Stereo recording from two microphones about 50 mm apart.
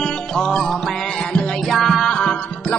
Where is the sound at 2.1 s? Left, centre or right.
Centre.